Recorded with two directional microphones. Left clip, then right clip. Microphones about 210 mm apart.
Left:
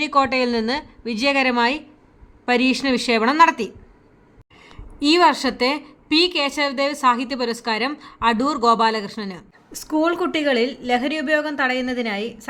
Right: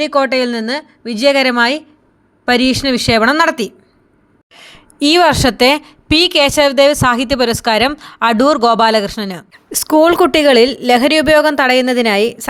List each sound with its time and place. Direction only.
0.0 s a woman's voice: 20° right (ahead or behind); by 12.5 s 50° right (ahead or behind)